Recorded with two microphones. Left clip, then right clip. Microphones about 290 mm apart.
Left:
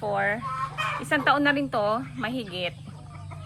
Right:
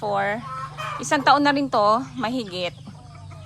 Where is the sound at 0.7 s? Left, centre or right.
Left.